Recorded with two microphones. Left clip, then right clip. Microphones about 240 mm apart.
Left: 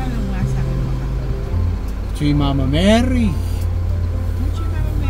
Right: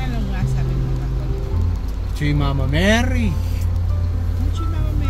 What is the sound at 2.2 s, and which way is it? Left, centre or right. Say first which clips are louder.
Speech: left 4 dB; centre.